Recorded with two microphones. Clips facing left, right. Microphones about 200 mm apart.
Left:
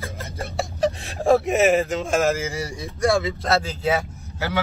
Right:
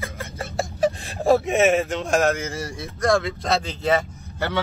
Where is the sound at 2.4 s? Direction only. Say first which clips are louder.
Left 1 dB; 15° left (ahead or behind).